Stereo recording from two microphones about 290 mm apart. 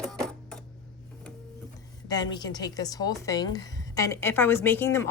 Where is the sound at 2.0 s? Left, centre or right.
Centre.